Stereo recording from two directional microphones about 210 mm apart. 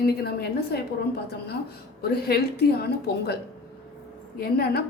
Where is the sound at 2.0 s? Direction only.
50° left (ahead or behind).